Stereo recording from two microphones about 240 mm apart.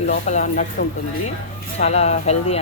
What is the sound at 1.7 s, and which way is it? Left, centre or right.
Speech, left.